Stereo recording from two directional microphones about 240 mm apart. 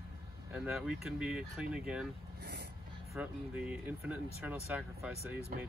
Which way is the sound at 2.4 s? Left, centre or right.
Right.